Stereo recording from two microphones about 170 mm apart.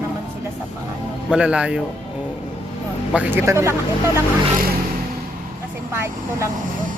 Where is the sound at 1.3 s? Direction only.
5° right (ahead or behind).